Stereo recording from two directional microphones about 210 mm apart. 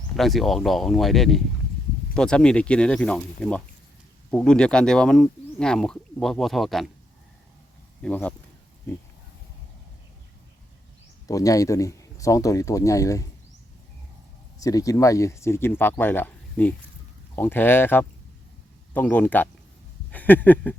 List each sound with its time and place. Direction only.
0.2 s speech: centre (ahead or behind)
8.0 s speech: 5° left (ahead or behind)
11.3 s speech: 15° left (ahead or behind)
14.6 s speech: 15° left (ahead or behind)